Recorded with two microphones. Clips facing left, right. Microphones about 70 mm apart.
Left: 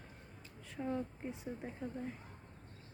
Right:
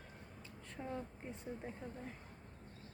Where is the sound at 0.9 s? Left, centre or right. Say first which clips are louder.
Left 5 dB; centre.